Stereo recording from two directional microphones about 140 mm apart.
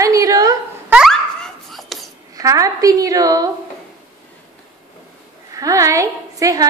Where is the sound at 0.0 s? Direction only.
25° right (ahead or behind).